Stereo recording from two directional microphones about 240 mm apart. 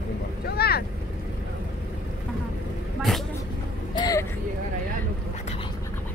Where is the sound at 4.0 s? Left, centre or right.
Centre.